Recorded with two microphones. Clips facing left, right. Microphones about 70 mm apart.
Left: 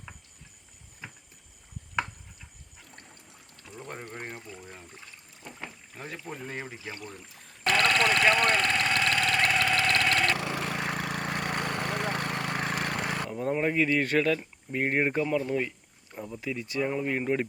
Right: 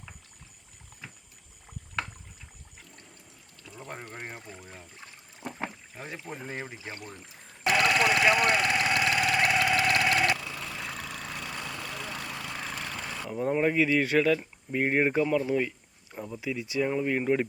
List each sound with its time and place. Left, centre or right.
3.7 s pour: centre
4.6 s trickle: centre
5.5 s rowboat: right
6.0 s boat: centre
6.3 s speech: centre
7.6 s engine: centre
10.3 s a sound: left
13.3 s speech: centre